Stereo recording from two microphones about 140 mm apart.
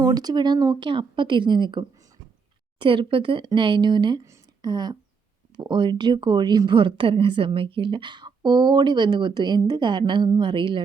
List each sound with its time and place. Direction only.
0.0 s a woman's voice: 30° right (ahead or behind)